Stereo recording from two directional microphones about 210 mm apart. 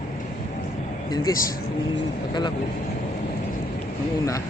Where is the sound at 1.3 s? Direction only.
15° left (ahead or behind).